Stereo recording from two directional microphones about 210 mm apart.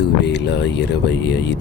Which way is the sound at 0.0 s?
55° left (ahead or behind).